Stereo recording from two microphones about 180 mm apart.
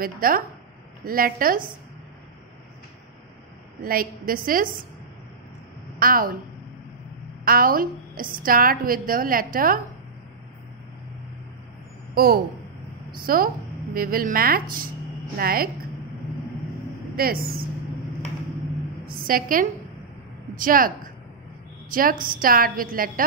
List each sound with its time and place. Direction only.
0.0 s a woman's voice: 55° right (ahead or behind)
3.8 s a woman's voice: 55° right (ahead or behind)
5.9 s a woman's voice: 55° right (ahead or behind)
7.4 s a woman's voice: 55° right (ahead or behind)
12.1 s a woman's voice: 55° right (ahead or behind)
17.1 s speech: 55° right (ahead or behind)
19.0 s a woman's voice: 50° right (ahead or behind)
21.9 s a woman's voice: 50° right (ahead or behind)